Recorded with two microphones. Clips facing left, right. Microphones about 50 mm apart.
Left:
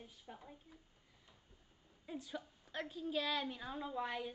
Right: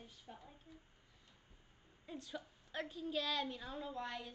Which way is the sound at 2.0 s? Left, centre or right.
Centre.